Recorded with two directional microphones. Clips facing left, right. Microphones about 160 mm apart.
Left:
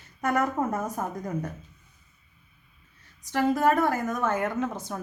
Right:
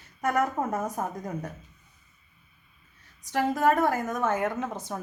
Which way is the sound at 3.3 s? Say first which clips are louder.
Left 1 dB; 15° right (ahead or behind).